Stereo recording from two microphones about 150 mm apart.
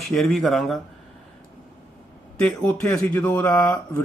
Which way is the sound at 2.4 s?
10° left (ahead or behind).